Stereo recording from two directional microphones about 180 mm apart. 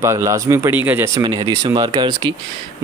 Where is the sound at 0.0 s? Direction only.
15° right (ahead or behind).